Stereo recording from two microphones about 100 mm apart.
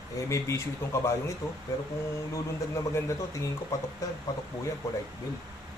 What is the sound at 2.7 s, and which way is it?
Speech, 30° left (ahead or behind).